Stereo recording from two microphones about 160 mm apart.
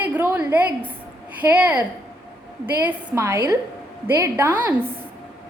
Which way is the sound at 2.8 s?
15° right (ahead or behind).